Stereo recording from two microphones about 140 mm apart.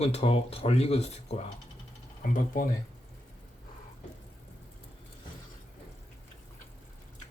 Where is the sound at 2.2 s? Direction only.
70° left (ahead or behind).